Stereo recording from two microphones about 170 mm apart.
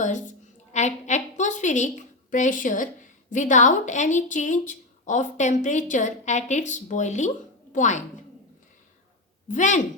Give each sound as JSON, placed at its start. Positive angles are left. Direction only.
{"t": 0.0, "sound": "a woman's voice", "side_deg": 45}
{"t": 9.5, "sound": "a woman's voice", "side_deg": 45}